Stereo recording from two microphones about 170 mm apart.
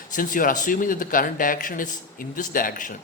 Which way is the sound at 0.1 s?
55° left (ahead or behind).